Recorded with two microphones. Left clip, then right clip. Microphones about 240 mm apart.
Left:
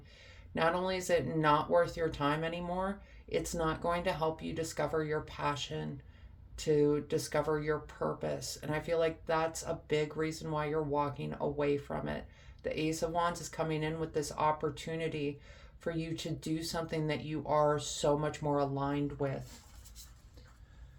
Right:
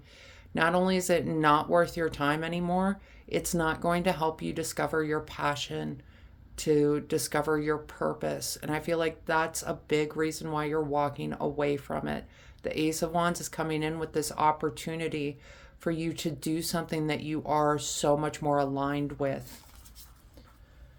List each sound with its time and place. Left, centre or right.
0.2 s speech: right